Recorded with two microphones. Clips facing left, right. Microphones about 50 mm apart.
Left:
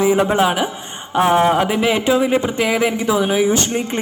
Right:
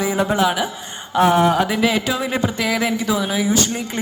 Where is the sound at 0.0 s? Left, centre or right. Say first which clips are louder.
Left 3 dB; left.